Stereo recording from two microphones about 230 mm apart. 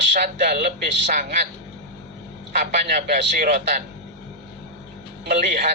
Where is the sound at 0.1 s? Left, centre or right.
Right.